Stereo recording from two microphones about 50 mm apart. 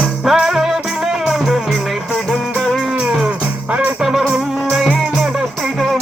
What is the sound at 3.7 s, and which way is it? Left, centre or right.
Music, right.